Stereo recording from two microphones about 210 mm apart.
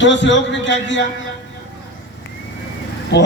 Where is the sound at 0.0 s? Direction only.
60° left (ahead or behind).